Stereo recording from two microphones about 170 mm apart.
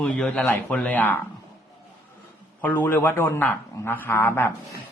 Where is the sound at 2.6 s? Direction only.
10° left (ahead or behind).